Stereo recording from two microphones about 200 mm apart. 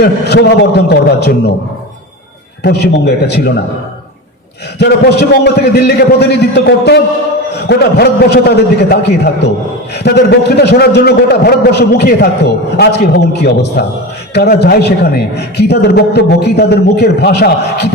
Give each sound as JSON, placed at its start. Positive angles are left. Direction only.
{"t": 0.0, "sound": "a man's voice", "side_deg": 55}
{"t": 2.6, "sound": "a man's voice", "side_deg": 55}
{"t": 4.8, "sound": "a man's voice", "side_deg": 55}